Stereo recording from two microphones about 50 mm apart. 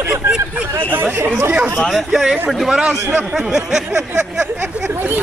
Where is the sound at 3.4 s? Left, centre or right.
Centre.